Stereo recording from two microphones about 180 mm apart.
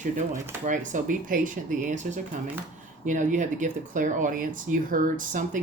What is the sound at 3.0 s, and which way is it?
Speech, 45° right (ahead or behind).